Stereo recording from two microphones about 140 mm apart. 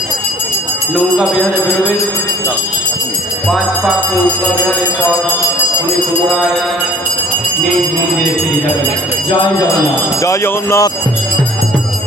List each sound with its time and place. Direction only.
0.9 s a man's voice: centre (ahead or behind)
10.2 s speech: 20° left (ahead or behind)